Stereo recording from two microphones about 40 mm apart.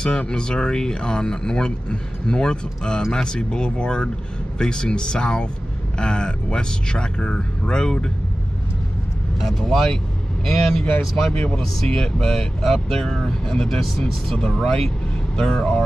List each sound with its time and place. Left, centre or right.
0.0 s speech: centre
9.4 s speech: centre
11.3 s speech: left
11.6 s speech: centre